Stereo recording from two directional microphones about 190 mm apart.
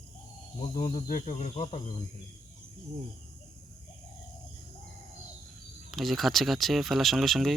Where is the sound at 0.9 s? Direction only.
40° left (ahead or behind).